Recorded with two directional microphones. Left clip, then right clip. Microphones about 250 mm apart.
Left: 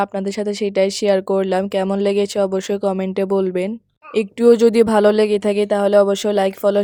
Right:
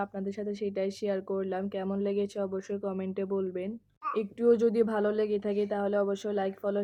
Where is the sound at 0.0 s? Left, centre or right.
Left.